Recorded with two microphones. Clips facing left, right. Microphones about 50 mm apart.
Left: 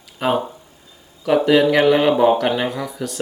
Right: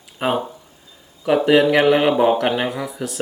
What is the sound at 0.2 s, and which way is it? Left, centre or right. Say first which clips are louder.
Speech: left 1 dB; right.